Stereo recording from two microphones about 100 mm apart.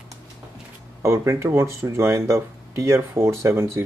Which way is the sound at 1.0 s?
25° right (ahead or behind).